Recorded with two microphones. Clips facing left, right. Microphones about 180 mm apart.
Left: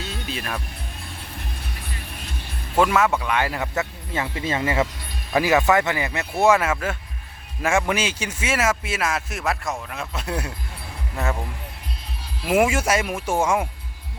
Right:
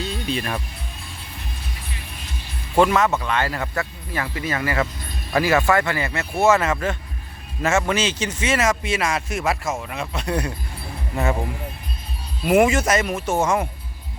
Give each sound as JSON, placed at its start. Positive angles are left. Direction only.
{"t": 0.0, "sound": "music", "side_deg": 0}
{"t": 2.7, "sound": "speech", "side_deg": 5}
{"t": 12.5, "sound": "speech", "side_deg": 5}